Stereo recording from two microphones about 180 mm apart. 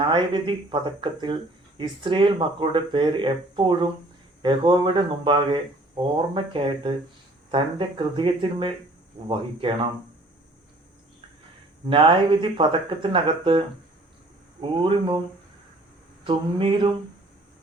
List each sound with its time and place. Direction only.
0.1 s speech: 25° right (ahead or behind)
11.9 s speech: 30° right (ahead or behind)
16.2 s speech: 30° right (ahead or behind)